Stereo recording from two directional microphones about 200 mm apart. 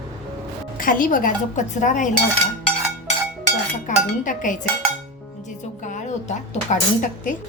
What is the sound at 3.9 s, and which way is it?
Dishes, 40° left (ahead or behind).